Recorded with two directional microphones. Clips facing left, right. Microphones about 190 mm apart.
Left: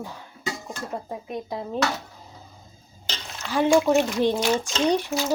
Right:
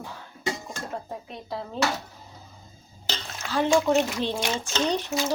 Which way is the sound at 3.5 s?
15° left (ahead or behind).